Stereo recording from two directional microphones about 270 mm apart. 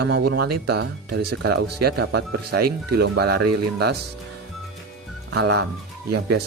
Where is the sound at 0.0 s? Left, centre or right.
Right.